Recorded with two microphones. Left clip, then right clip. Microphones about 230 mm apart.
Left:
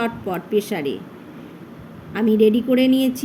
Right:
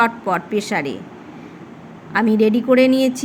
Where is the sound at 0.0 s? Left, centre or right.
Centre.